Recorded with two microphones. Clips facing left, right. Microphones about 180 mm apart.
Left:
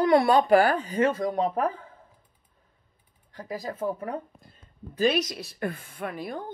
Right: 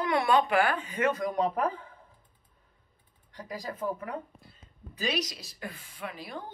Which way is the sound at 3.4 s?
30° left (ahead or behind).